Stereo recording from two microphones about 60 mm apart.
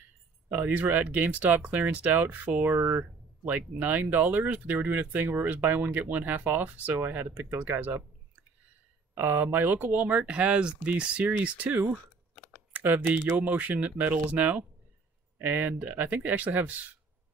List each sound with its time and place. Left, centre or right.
0.5 s speech: right
9.1 s speech: right